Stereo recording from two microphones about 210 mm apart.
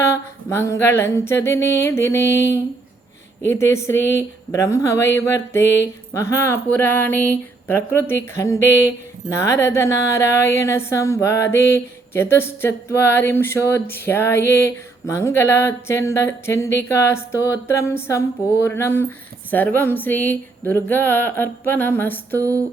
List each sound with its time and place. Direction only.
0.5 s speech: 10° left (ahead or behind)
3.4 s speech: 10° left (ahead or behind)
22.4 s a sound: 15° right (ahead or behind)